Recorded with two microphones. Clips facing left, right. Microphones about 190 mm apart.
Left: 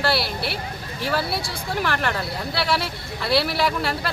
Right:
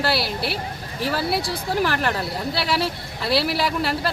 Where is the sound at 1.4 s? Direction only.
35° right (ahead or behind).